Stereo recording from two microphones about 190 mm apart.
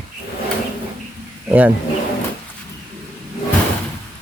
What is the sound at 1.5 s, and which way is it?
Speech, 10° right (ahead or behind).